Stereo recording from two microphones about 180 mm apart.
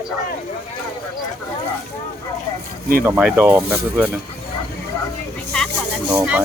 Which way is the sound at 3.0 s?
10° right (ahead or behind).